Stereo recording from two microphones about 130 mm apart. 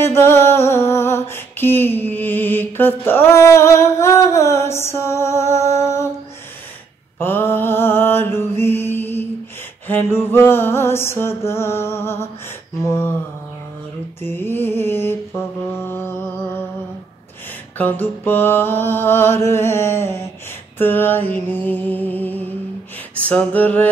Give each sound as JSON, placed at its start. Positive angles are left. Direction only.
{"t": 0.0, "sound": "music", "side_deg": 20}
{"t": 7.2, "sound": "mantra", "side_deg": 15}
{"t": 9.8, "sound": "music", "side_deg": 15}
{"t": 14.2, "sound": "mantra", "side_deg": 15}
{"t": 17.7, "sound": "mantra", "side_deg": 15}